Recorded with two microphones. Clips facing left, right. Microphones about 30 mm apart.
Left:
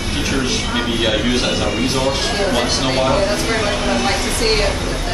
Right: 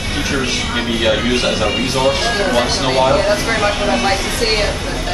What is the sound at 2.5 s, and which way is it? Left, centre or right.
Speech, centre.